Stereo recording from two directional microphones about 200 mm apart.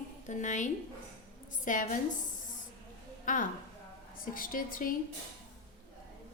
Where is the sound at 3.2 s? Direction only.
40° left (ahead or behind).